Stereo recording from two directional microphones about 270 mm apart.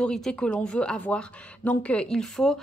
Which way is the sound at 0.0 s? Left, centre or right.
Centre.